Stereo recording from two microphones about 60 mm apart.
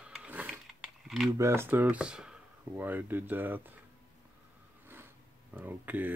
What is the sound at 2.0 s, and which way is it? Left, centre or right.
Speech, centre.